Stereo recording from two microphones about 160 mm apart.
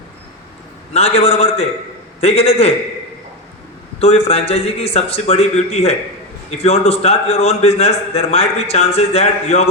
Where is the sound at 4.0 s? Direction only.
40° left (ahead or behind).